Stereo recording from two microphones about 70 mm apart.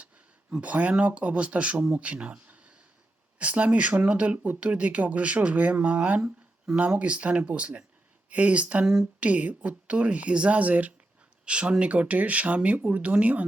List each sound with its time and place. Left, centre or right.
0.5 s speech: right
9.2 s speech: right